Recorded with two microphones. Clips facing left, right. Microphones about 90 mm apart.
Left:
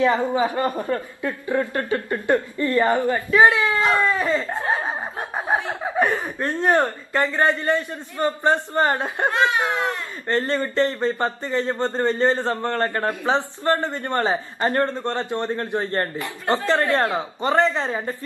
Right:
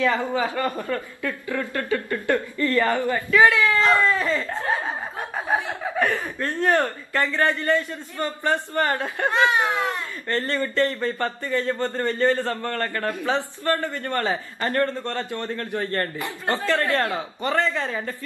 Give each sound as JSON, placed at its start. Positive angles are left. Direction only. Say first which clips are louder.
{"t": 0.0, "sound": "speech", "louder": "left 3 dB", "side_deg": 20}